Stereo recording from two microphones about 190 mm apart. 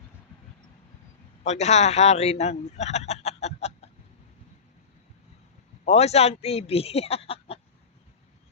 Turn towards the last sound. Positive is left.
turn(degrees=30)  # may be behind; listen again after turning